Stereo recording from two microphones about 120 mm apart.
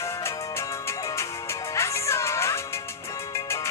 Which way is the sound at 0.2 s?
20° left (ahead or behind).